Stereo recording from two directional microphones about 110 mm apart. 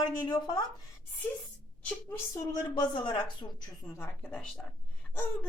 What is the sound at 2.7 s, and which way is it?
Speech, 45° left (ahead or behind).